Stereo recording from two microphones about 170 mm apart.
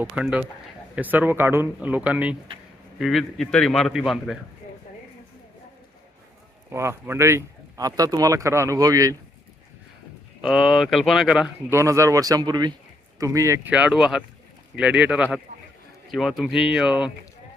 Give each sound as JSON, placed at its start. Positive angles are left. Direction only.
{"t": 0.0, "sound": "a man's voice", "side_deg": -5}
{"t": 6.7, "sound": "speech", "side_deg": -15}
{"t": 10.5, "sound": "a man's voice", "side_deg": 0}
{"t": 11.7, "sound": "a man's voice", "side_deg": -15}